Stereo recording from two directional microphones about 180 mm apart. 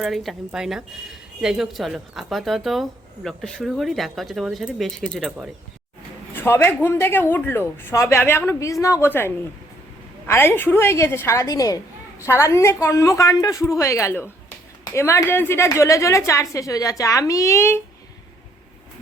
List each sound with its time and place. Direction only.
0.0 s speech: centre (ahead or behind)
6.3 s speech: 10° left (ahead or behind)